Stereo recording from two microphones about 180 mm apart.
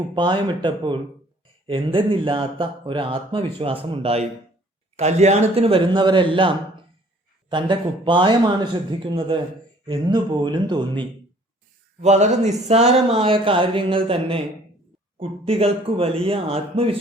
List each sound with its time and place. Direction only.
0.1 s speech: 25° right (ahead or behind)
7.5 s speech: 25° right (ahead or behind)
12.0 s speech: 40° right (ahead or behind)